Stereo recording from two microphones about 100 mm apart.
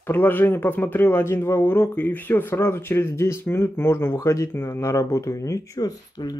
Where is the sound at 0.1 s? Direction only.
20° left (ahead or behind).